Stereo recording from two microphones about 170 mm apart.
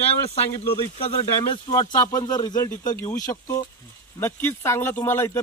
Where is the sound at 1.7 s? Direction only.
25° left (ahead or behind).